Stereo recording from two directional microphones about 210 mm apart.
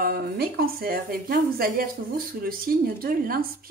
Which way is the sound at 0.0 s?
45° right (ahead or behind).